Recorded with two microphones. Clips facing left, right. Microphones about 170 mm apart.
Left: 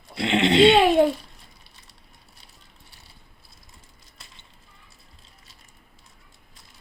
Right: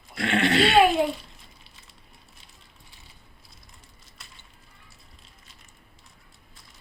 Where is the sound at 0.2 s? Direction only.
20° left (ahead or behind).